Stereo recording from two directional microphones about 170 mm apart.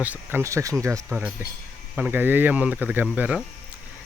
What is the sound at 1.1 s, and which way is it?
Speech, 5° right (ahead or behind).